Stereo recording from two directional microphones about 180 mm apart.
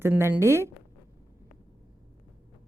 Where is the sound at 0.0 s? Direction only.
15° right (ahead or behind).